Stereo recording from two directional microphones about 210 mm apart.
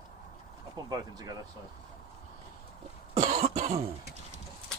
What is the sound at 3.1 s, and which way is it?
Cough, 40° right (ahead or behind).